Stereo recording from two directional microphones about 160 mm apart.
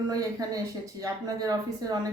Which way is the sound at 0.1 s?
20° right (ahead or behind).